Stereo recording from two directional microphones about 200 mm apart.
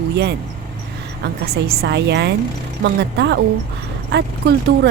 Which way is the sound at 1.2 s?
55° right (ahead or behind).